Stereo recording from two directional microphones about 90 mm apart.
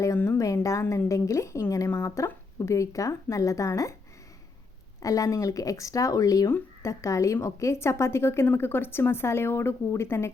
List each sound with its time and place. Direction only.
0.3 s speech: 35° left (ahead or behind)
5.0 s a woman's voice: 40° left (ahead or behind)